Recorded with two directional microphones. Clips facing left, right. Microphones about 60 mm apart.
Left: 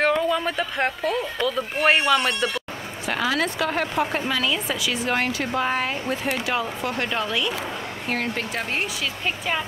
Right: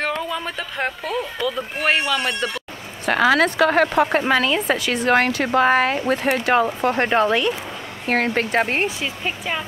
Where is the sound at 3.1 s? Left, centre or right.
Right.